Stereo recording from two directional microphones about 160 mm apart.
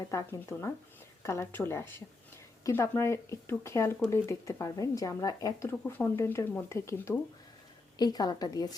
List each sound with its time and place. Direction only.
0.1 s a woman's voice: 20° left (ahead or behind)